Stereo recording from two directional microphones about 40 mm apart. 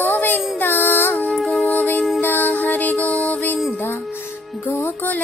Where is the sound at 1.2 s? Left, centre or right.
Centre.